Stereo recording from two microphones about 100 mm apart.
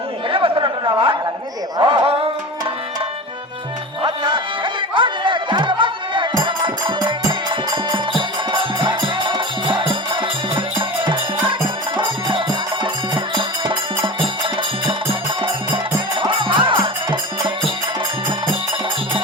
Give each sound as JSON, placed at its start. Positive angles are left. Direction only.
{"t": 0.3, "sound": "a sound", "side_deg": -60}
{"t": 4.0, "sound": "music", "side_deg": -55}
{"t": 13.3, "sound": "music", "side_deg": -55}
{"t": 15.4, "sound": "music", "side_deg": -60}